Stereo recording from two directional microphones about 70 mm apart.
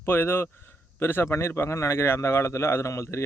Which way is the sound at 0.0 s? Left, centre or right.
Left.